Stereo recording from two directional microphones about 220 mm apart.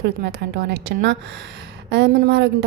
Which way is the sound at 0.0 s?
45° right (ahead or behind).